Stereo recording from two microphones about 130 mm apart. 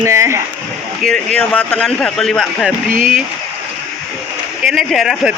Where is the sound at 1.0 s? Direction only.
10° left (ahead or behind).